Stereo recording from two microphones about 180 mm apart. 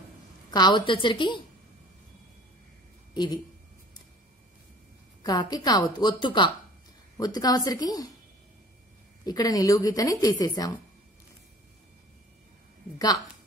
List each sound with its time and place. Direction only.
0.5 s a woman's voice: 25° left (ahead or behind)
5.2 s a woman's voice: 20° left (ahead or behind)
9.2 s a woman's voice: 20° left (ahead or behind)